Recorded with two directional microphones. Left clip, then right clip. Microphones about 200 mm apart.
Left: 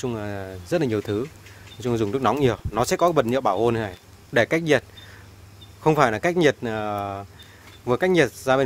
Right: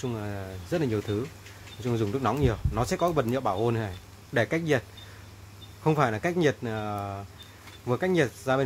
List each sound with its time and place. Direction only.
0.0 s speech: 45° left (ahead or behind)
5.9 s speech: 45° left (ahead or behind)